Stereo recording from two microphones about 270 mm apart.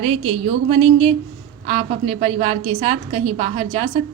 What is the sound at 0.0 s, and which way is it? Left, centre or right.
A woman's voice, right.